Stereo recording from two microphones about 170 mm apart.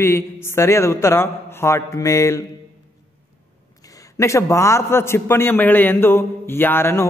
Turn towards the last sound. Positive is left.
turn(degrees=15)  # may be behind; listen again after turning